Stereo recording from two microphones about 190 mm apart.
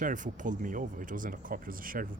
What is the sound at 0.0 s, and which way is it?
Speech, 40° right (ahead or behind).